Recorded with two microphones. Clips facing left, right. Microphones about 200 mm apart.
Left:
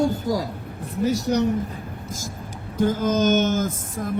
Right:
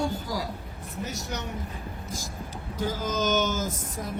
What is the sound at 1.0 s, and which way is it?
Speech, 35° left (ahead or behind).